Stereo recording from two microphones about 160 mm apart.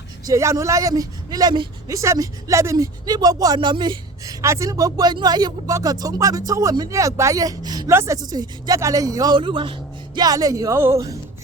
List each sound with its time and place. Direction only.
0.3 s speech: 20° right (ahead or behind)